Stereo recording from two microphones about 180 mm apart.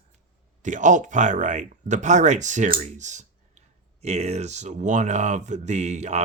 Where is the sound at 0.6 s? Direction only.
45° right (ahead or behind).